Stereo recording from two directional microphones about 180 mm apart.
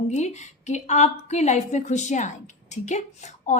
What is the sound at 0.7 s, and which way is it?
A woman's voice, 40° left (ahead or behind).